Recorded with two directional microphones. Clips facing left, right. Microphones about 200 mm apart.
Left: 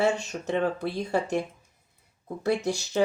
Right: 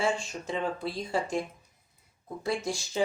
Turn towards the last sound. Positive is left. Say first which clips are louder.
# left 4 dB
turn(degrees=65)  # may be behind; listen again after turning